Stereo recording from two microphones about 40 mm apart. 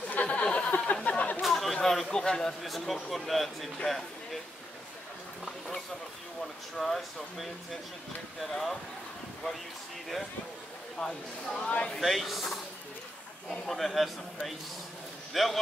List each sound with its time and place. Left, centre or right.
0.1 s a sound: left
0.4 s a sound: left
1.0 s a sound: left
1.4 s chatter: centre
1.8 s speech: centre
2.6 s speech: centre
6.8 s speech: centre
11.0 s speech: centre
11.6 s speech: left
12.0 s speech: centre